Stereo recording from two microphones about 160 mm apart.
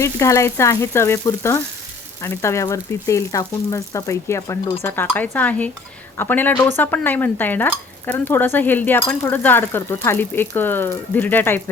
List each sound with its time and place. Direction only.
0.0 s dishes: 20° left (ahead or behind)
2.2 s speech: 15° left (ahead or behind)
4.8 s dishes: 15° left (ahead or behind)